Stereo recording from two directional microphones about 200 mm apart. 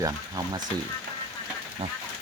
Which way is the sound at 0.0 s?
20° right (ahead or behind).